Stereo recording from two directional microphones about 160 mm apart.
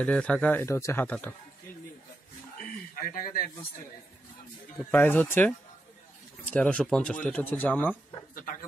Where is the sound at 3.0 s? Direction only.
65° left (ahead or behind).